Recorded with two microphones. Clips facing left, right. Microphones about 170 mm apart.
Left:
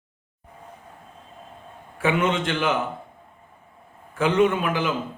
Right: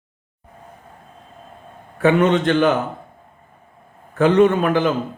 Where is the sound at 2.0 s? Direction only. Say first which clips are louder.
Right 7 dB; 40° right (ahead or behind).